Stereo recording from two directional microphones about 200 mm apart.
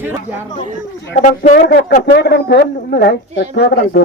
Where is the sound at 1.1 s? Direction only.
40° left (ahead or behind); by 4.0 s 55° left (ahead or behind).